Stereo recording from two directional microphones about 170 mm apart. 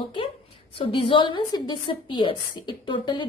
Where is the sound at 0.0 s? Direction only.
30° left (ahead or behind).